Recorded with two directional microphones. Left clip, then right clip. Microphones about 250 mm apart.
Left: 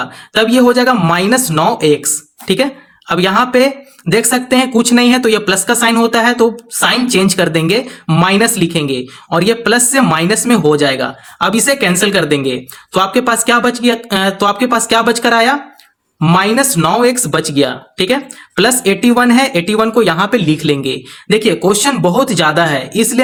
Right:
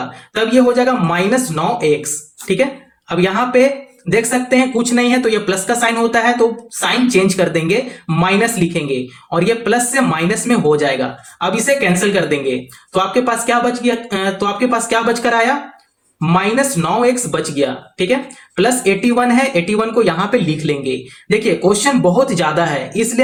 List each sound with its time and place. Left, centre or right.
0.7 s speech: left